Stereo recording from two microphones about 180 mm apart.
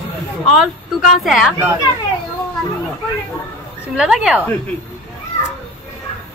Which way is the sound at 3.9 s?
5° right (ahead or behind).